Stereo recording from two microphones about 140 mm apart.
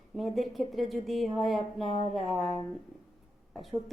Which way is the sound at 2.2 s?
Centre (ahead or behind).